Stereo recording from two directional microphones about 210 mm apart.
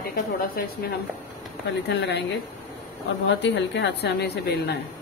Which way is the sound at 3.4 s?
55° left (ahead or behind).